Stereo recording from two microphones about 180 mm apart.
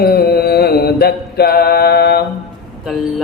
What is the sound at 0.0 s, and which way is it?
Mantra, 60° left (ahead or behind).